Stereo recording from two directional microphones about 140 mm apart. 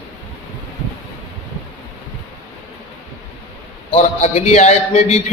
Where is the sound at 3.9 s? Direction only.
50° left (ahead or behind).